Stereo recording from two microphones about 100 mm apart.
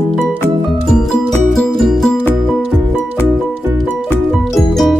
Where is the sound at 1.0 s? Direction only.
Centre (ahead or behind).